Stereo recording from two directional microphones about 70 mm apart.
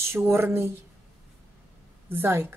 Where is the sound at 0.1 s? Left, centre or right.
Right.